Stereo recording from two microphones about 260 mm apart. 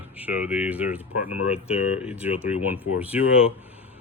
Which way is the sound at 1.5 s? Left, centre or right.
Left.